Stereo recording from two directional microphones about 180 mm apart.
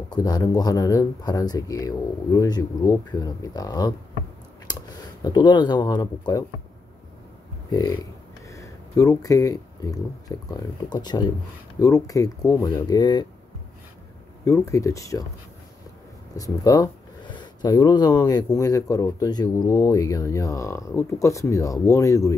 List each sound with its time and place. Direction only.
0.1 s speech: 20° left (ahead or behind)
7.7 s speech: 20° left (ahead or behind)
14.4 s speech: 15° left (ahead or behind)
16.3 s speech: 20° left (ahead or behind)